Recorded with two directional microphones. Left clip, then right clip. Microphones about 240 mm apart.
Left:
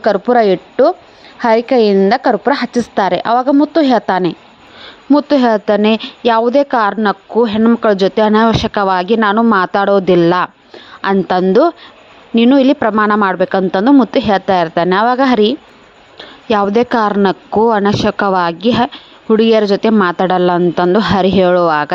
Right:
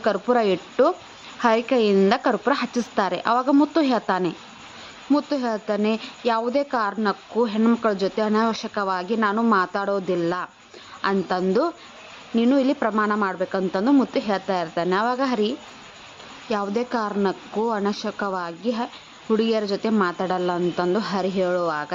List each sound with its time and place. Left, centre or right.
0.0 s a woman's voice: left